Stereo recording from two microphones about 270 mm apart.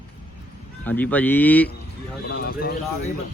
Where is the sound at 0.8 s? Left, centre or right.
Centre.